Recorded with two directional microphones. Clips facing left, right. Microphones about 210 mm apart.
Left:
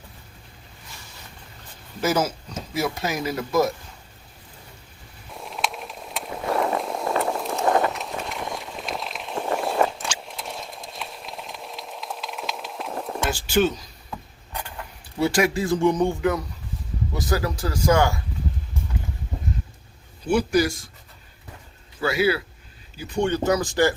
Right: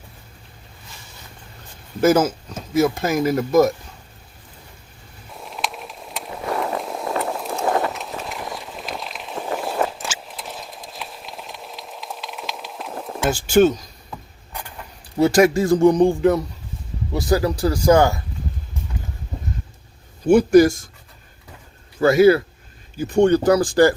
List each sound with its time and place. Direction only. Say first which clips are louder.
2.0 s speech: right 7 dB; 50° right (ahead or behind)
5.5 s skateboard: even; centre (ahead or behind)
13.3 s speech: right 7 dB; 45° right (ahead or behind)
15.2 s speech: right 6 dB; 45° right (ahead or behind)
17.4 s speech: right 6 dB; 35° right (ahead or behind)
20.2 s speech: right 9 dB; 45° right (ahead or behind)
22.0 s speech: right 9 dB; 45° right (ahead or behind)